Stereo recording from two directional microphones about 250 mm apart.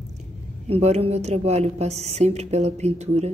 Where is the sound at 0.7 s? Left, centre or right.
Right.